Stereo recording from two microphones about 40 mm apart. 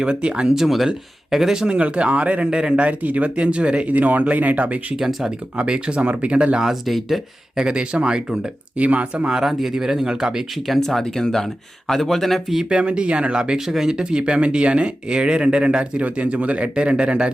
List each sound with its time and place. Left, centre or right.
0.0 s speech: right
0.4 s speech: centre
1.8 s speech: right
3.9 s speech: right
4.9 s speech: centre
5.6 s speech: right
6.8 s speech: centre
7.5 s speech: right
8.8 s speech: right
9.3 s speech: centre
10.8 s speech: centre
12.6 s speech: right